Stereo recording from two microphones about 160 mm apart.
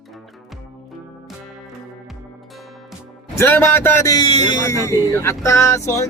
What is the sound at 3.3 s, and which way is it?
A man's voice, 15° left (ahead or behind).